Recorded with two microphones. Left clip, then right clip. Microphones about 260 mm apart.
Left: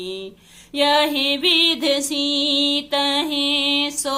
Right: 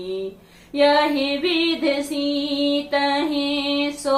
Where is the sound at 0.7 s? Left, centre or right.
Left.